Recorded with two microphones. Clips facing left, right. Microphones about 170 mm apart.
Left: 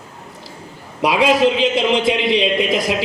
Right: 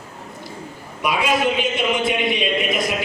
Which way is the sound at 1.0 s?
90° left.